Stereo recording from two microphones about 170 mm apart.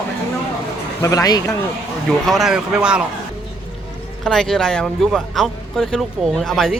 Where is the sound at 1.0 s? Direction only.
20° left (ahead or behind).